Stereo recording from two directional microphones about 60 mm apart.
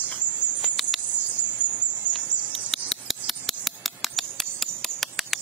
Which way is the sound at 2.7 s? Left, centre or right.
Centre.